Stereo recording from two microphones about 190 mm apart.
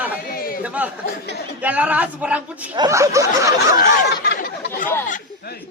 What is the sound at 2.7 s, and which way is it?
Speech, 15° right (ahead or behind).